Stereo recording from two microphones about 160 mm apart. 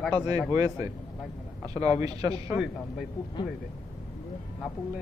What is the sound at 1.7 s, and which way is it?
Speech, 40° left (ahead or behind).